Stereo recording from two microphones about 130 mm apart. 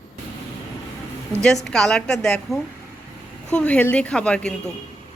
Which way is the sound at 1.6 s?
5° left (ahead or behind).